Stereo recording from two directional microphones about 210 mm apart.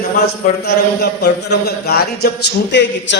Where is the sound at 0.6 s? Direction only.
50° left (ahead or behind).